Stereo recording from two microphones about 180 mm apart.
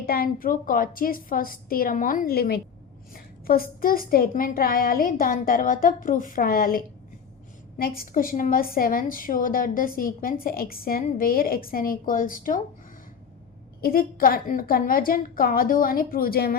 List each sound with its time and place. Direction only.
0.0 s a woman's voice: 55° left (ahead or behind)
13.8 s a woman's voice: 55° left (ahead or behind)